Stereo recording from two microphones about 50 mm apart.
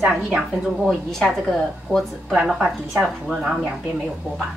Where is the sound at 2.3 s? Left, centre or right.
Centre.